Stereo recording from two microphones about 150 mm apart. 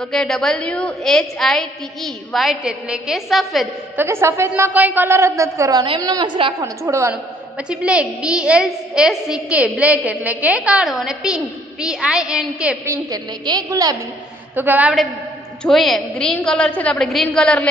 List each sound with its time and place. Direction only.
0.0 s a woman's voice: centre (ahead or behind)
3.9 s a woman's voice: 15° right (ahead or behind); by 6.5 s 35° right (ahead or behind)
6.6 s a woman's voice: 20° right (ahead or behind)
7.5 s a woman's voice: 5° right (ahead or behind); by 13.9 s 25° right (ahead or behind)
14.5 s a woman's voice: 10° right (ahead or behind)
15.6 s a woman's voice: centre (ahead or behind)